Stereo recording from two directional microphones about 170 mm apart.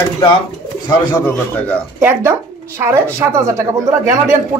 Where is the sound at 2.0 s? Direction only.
15° right (ahead or behind).